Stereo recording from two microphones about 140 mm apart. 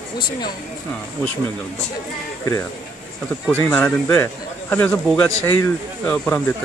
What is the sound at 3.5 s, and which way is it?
A man's voice, 15° left (ahead or behind).